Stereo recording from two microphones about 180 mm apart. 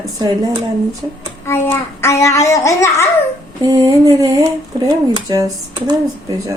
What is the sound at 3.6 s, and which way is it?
Speech, 20° right (ahead or behind).